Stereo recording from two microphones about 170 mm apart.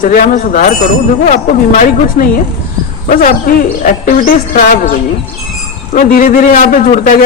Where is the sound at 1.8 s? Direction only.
50° left (ahead or behind).